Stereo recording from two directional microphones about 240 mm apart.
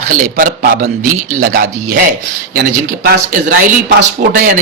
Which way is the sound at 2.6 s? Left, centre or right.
Right.